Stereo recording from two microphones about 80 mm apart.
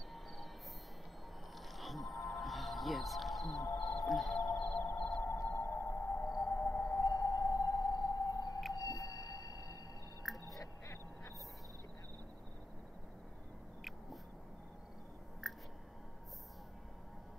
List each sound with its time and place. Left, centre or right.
1.8 s music: centre
4.9 s music: centre
5.5 s music: left
6.2 s music: left
6.5 s music: left
7.0 s music: left
8.7 s a sound: left
10.3 s a sound: centre
10.6 s duck: left
15.4 s a sound: centre